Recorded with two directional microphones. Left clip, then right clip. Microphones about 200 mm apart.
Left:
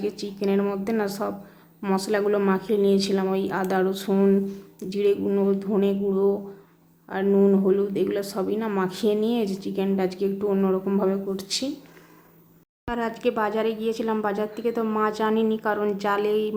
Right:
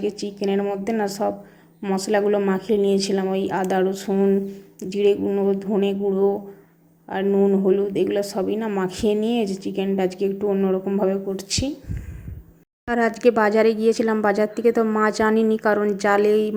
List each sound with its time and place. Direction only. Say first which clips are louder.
0.0 s speech: right 3 dB; 10° right (ahead or behind)
12.8 s speech: right 7 dB; 20° right (ahead or behind)